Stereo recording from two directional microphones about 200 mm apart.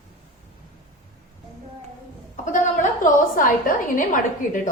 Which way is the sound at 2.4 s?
40° left (ahead or behind).